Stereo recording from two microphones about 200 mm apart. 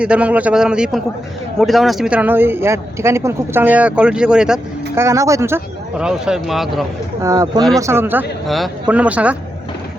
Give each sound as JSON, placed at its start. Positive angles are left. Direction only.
{"t": 0.0, "sound": "a man's voice", "side_deg": -5}
{"t": 5.0, "sound": "speech", "side_deg": -15}
{"t": 7.2, "sound": "speech", "side_deg": -15}
{"t": 8.4, "sound": "speech", "side_deg": 0}